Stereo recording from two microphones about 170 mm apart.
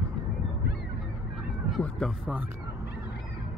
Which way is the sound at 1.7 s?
Centre (ahead or behind).